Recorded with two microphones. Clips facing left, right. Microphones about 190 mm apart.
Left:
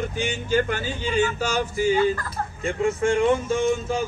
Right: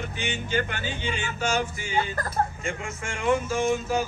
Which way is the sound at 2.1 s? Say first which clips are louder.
Right 4 dB; 40° right (ahead or behind).